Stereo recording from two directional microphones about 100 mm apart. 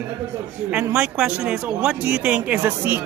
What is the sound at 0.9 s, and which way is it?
A man's voice, 10° right (ahead or behind).